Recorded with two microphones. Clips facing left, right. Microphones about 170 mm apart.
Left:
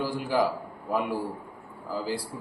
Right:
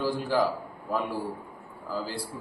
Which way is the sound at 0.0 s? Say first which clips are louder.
Even; 15° left (ahead or behind).